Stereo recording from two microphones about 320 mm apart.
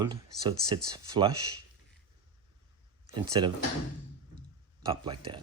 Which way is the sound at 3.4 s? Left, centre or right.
Centre.